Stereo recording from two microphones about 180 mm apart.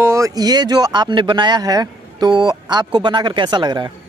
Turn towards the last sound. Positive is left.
turn(degrees=-25)  # may be behind; listen again after turning